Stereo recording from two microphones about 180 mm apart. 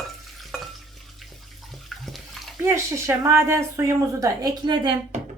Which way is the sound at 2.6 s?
15° right (ahead or behind).